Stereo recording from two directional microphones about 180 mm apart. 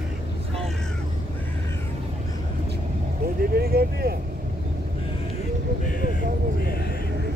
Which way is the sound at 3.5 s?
60° right (ahead or behind).